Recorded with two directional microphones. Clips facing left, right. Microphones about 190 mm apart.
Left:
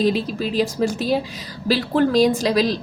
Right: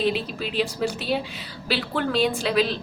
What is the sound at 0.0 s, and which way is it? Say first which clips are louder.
A woman's voice: left 5 dB; 40° left (ahead or behind).